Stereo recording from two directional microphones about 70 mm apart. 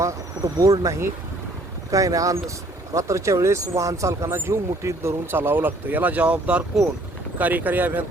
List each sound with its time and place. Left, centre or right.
0.4 s speech: right